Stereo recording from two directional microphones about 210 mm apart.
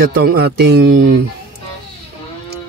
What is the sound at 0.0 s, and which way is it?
Speech, 45° right (ahead or behind).